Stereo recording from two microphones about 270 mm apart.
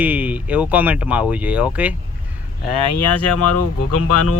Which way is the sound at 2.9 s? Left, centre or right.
Left.